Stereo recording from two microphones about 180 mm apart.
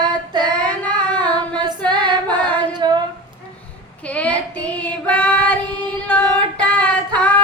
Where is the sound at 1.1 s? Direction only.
25° right (ahead or behind).